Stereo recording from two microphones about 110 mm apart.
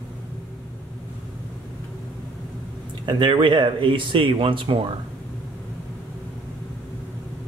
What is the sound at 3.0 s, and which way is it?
Speech, 45° right (ahead or behind).